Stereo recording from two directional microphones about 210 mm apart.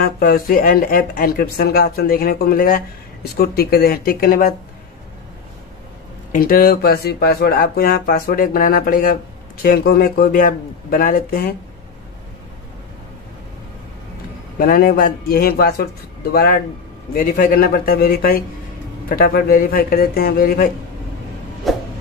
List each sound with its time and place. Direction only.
0.0 s speech: 45° left (ahead or behind)
6.3 s speech: 45° left (ahead or behind)
14.6 s speech: 45° left (ahead or behind)
21.7 s a sound: centre (ahead or behind)